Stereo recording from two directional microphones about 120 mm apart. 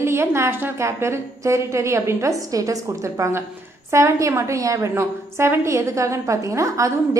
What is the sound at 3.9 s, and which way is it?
A woman's voice, 25° right (ahead or behind).